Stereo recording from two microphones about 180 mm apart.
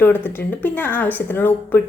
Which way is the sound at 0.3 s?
10° left (ahead or behind).